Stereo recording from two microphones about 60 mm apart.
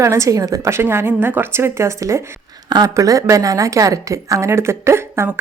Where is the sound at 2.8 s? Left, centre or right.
Right.